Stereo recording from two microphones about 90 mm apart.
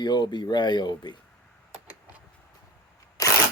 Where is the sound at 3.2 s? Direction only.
35° left (ahead or behind).